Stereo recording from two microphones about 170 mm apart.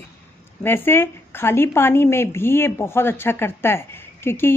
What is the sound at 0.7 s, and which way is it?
A woman's voice, 15° left (ahead or behind).